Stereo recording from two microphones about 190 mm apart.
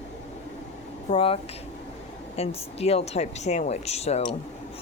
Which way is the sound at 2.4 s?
30° left (ahead or behind).